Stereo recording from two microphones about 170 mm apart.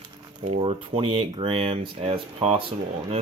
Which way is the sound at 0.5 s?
35° right (ahead or behind).